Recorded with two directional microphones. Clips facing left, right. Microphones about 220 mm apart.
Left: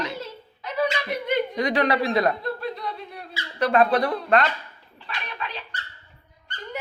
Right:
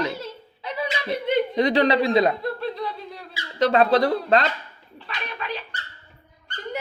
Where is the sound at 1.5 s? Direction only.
25° right (ahead or behind).